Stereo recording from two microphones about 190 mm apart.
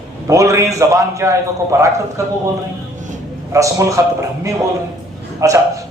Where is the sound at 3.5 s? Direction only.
15° right (ahead or behind).